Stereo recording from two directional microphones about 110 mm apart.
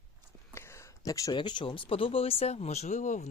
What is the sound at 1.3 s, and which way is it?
Speech, 45° left (ahead or behind).